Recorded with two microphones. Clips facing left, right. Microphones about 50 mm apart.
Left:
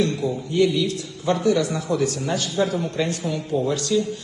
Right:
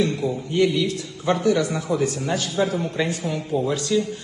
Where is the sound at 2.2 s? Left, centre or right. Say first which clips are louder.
Even; centre.